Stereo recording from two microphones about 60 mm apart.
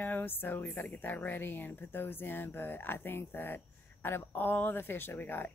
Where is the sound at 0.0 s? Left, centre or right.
Left.